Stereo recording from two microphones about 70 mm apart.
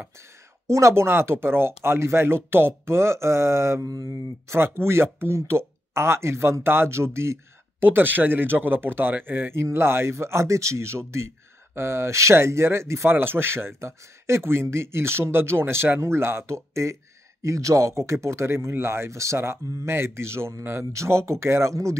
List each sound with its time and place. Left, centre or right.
0.7 s speech: right
3.8 s mantra: right
4.5 s speech: right
7.8 s speech: right